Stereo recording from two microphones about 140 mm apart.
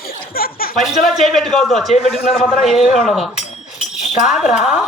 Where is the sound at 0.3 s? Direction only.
90° left.